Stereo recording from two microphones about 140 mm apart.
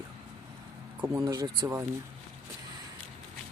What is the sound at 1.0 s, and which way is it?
Speech, 20° right (ahead or behind).